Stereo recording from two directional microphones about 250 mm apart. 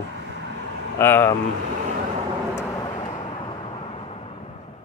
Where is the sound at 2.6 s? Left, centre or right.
Centre.